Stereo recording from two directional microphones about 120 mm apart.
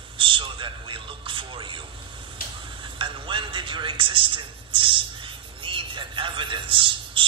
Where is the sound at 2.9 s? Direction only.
45° right (ahead or behind).